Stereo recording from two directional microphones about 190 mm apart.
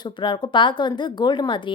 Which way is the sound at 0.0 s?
25° left (ahead or behind).